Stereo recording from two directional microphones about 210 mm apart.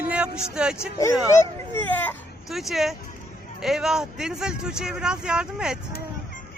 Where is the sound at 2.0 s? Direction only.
Centre (ahead or behind).